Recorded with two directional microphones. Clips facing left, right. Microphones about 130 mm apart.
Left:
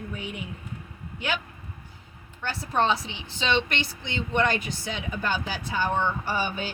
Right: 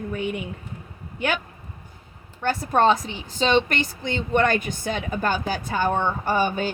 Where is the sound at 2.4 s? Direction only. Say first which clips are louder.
Right 6 dB; 50° right (ahead or behind).